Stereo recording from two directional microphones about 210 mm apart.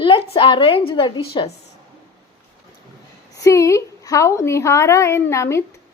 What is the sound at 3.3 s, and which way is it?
A woman's voice, 15° left (ahead or behind).